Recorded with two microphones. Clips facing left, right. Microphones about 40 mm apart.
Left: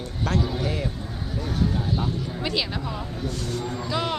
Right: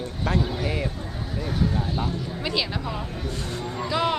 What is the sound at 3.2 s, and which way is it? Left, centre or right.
Speech, right.